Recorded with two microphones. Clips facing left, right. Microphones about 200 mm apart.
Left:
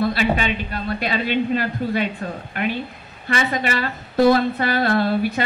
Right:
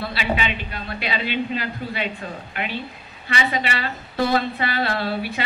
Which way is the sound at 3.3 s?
45° left (ahead or behind).